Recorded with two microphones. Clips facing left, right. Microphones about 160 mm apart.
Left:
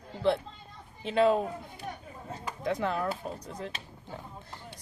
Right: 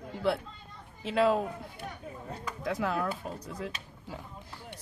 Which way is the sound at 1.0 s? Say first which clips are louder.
Left 2 dB; 5° right (ahead or behind).